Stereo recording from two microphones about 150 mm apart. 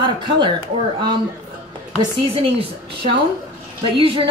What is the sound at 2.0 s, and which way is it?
Speech, 35° right (ahead or behind).